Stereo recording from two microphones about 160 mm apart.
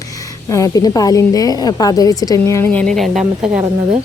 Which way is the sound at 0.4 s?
20° left (ahead or behind).